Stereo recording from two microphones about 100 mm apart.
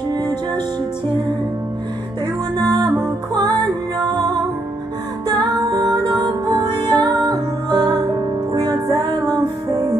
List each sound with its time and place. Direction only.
2.5 s music: 45° right (ahead or behind)
4.0 s music: 45° right (ahead or behind)